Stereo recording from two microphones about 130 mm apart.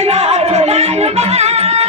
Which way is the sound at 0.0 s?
55° right (ahead or behind).